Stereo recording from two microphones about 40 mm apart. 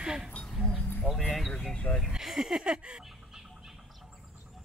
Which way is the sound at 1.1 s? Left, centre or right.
Left.